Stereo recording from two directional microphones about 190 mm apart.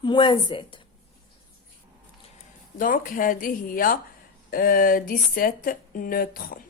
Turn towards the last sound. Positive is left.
turn(degrees=50)  # may be behind; listen again after turning